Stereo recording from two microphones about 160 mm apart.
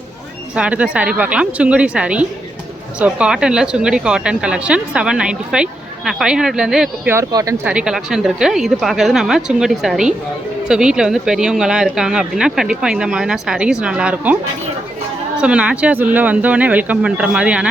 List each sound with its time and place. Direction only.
0.5 s speech: 5° right (ahead or behind)
7.1 s speech: 20° right (ahead or behind)
7.6 s speech: 5° right (ahead or behind)
15.4 s speech: 5° right (ahead or behind)